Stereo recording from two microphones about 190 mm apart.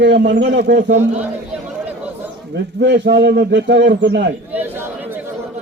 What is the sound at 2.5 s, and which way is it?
A man's voice, 65° right (ahead or behind).